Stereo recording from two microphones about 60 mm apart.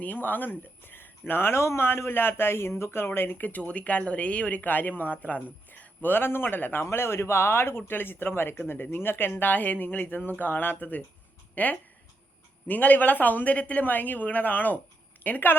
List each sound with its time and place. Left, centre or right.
0.0 s speech: left
6.8 s speech: left